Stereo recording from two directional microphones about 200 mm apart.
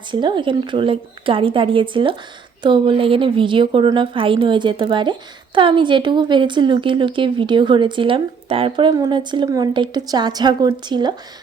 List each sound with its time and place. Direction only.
0.1 s speech: 25° right (ahead or behind)